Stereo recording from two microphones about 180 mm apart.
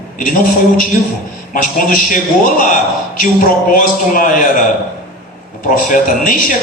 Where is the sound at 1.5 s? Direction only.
50° left (ahead or behind).